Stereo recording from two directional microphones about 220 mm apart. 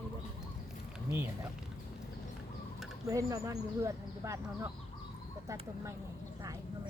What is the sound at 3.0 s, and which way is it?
Speech, 15° right (ahead or behind).